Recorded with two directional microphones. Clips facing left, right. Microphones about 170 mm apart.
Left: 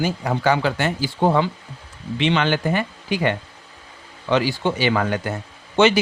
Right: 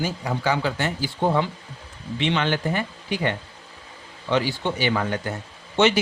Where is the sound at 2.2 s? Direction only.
90° left.